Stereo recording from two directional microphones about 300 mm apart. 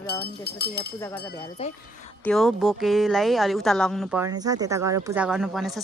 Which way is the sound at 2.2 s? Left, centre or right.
Centre.